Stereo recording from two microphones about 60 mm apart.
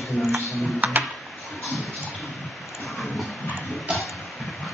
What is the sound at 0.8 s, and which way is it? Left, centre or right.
Typing, right.